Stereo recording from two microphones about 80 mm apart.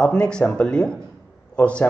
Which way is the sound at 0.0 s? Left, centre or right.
Centre.